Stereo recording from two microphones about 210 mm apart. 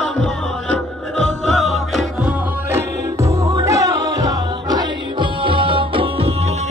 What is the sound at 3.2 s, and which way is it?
Music, 15° right (ahead or behind).